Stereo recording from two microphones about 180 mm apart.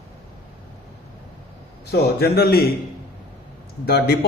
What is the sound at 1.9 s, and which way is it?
Speech, 60° left (ahead or behind).